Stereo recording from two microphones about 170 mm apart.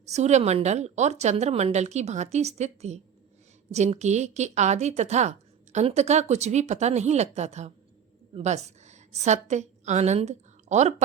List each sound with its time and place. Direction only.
0.1 s a woman's voice: 40° right (ahead or behind)